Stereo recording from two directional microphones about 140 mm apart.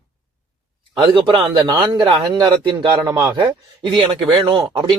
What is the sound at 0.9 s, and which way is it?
Speech, 30° right (ahead or behind).